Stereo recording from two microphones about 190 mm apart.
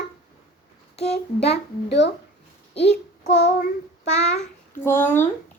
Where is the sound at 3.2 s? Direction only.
35° left (ahead or behind).